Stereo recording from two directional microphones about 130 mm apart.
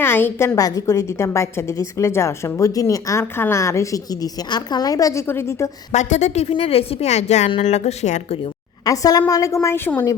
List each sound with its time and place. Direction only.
0.0 s a woman's voice: 15° left (ahead or behind)
5.9 s speech: 65° left (ahead or behind)
6.5 s a woman's voice: 50° left (ahead or behind)
8.8 s a woman's voice: 30° left (ahead or behind)